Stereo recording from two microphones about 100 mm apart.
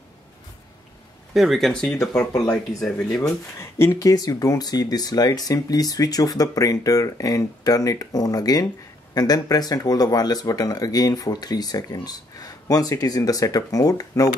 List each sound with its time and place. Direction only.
1.3 s speech: centre (ahead or behind)
2.1 s speech: 35° left (ahead or behind)
3.5 s speech: 25° left (ahead or behind)
4.1 s speech: 40° left (ahead or behind)